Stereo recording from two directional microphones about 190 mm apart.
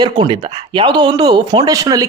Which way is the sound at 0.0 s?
25° right (ahead or behind).